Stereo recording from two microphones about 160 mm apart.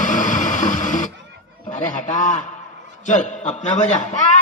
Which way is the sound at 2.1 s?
50° left (ahead or behind).